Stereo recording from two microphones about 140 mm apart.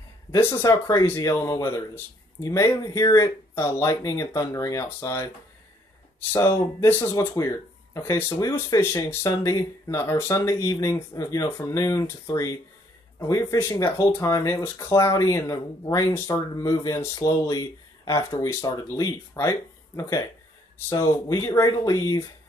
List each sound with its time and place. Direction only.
0.3 s speech: 20° left (ahead or behind)
6.3 s speech: 20° left (ahead or behind)